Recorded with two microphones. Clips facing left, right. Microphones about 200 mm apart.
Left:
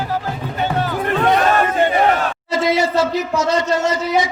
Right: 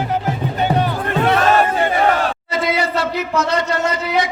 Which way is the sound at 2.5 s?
60° right (ahead or behind).